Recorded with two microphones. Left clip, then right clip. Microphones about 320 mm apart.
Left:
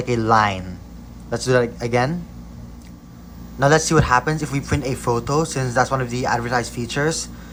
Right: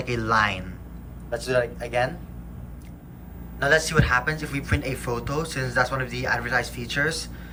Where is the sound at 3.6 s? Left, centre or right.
Centre.